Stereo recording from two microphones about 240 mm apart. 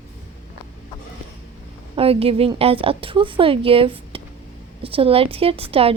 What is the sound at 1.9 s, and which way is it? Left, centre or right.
A woman's voice, right.